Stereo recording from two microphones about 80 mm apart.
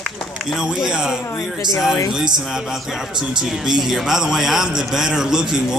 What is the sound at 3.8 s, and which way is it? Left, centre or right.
A man's voice, centre.